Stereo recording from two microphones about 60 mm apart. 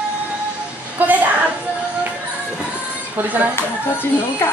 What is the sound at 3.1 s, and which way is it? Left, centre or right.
Speech, right.